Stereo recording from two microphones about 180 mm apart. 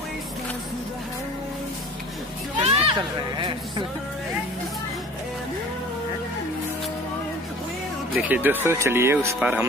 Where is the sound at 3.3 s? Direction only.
25° right (ahead or behind).